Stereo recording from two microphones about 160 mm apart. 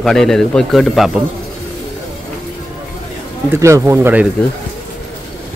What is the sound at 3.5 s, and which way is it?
Speech, 20° right (ahead or behind).